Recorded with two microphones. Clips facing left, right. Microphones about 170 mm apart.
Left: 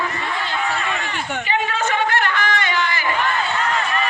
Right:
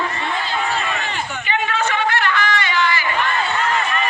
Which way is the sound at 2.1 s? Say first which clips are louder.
Right 1 dB; 45° left (ahead or behind).